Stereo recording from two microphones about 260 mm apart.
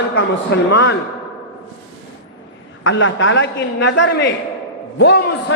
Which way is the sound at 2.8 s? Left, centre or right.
Left.